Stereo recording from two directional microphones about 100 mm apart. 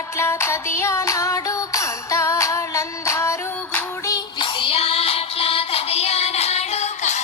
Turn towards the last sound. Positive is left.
turn(degrees=90)